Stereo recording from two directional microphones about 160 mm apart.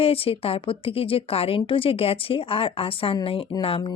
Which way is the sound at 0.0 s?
35° left (ahead or behind).